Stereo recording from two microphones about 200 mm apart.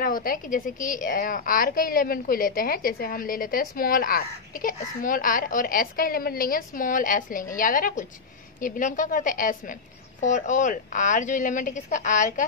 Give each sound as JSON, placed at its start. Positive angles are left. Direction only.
{"t": 0.0, "sound": "a woman's voice", "side_deg": 45}